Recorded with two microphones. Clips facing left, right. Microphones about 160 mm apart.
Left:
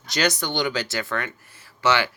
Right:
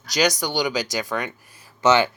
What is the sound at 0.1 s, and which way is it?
Speech, 10° right (ahead or behind).